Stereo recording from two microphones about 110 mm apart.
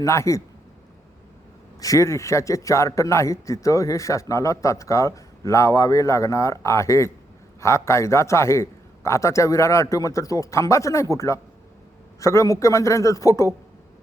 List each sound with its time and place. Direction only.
0.0 s a man's voice: 25° left (ahead or behind)
1.8 s a man's voice: 30° left (ahead or behind)